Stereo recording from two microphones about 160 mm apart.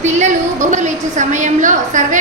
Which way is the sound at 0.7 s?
50° right (ahead or behind).